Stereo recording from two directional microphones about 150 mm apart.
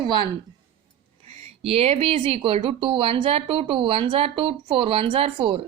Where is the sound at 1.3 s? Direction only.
40° right (ahead or behind).